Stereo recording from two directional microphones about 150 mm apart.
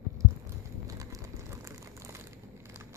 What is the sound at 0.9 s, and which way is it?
Crumpling, 20° right (ahead or behind).